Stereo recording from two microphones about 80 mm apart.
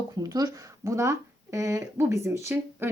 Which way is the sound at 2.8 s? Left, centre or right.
Right.